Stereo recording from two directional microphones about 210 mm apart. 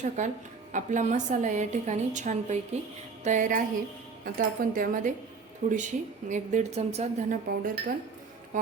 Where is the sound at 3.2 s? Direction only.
35° right (ahead or behind).